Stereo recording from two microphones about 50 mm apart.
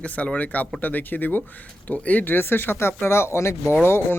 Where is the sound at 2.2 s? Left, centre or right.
Left.